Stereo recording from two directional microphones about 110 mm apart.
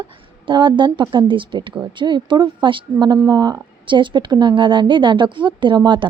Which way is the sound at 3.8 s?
45° right (ahead or behind).